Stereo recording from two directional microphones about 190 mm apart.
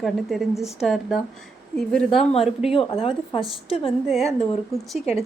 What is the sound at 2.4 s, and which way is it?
Speech, centre (ahead or behind).